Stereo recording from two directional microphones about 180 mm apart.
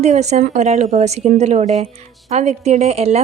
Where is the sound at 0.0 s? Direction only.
40° right (ahead or behind).